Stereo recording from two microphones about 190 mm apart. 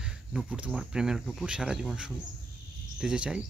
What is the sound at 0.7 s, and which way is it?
Speech, centre (ahead or behind).